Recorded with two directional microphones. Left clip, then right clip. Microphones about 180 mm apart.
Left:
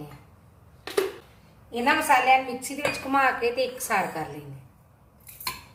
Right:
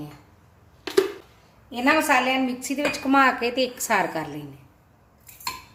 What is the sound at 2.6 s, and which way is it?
A woman's voice, 60° right (ahead or behind).